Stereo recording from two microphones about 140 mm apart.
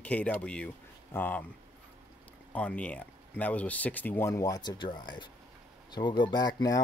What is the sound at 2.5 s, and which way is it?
Speech, 10° left (ahead or behind).